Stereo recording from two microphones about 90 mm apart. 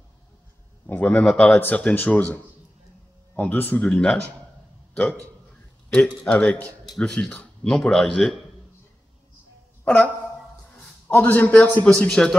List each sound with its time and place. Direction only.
1.0 s speech: 10° left (ahead or behind)
3.8 s a man's voice: 10° left (ahead or behind)
9.8 s speech: 15° left (ahead or behind)